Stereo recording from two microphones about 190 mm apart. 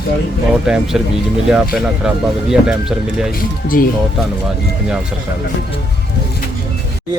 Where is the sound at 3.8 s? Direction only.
50° left (ahead or behind).